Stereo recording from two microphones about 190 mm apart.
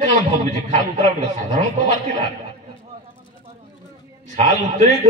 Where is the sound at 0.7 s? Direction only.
35° right (ahead or behind).